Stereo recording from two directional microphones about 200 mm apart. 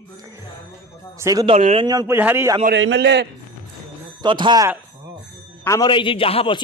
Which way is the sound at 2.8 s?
60° right (ahead or behind).